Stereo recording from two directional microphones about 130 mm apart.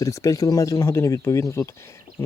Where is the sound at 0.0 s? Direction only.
25° left (ahead or behind).